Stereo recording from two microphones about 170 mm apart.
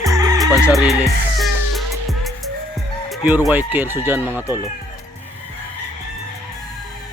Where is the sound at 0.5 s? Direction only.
5° right (ahead or behind).